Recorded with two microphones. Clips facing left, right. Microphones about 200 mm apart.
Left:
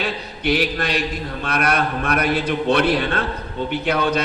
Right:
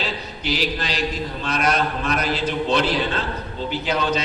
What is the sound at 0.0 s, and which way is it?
A man's voice, 60° left (ahead or behind).